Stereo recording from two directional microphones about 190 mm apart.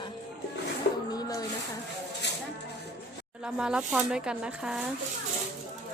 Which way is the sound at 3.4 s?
5° right (ahead or behind).